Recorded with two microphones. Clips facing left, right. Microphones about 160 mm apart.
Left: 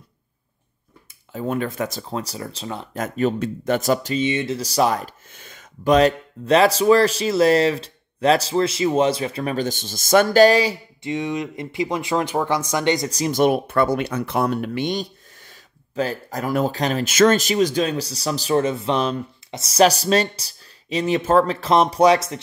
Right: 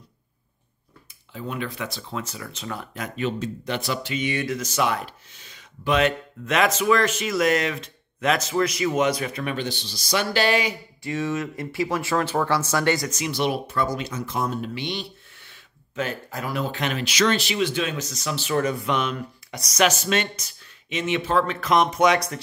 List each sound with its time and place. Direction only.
1.3 s speech: 45° left (ahead or behind); by 2.9 s 25° left (ahead or behind)
2.9 s speech: 40° left (ahead or behind)
4.2 s speech: 25° left (ahead or behind)
11.0 s speech: 20° left (ahead or behind)
13.1 s speech: 40° left (ahead or behind)
21.5 s speech: 30° left (ahead or behind)